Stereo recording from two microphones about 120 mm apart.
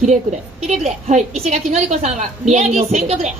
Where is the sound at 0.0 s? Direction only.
70° right (ahead or behind).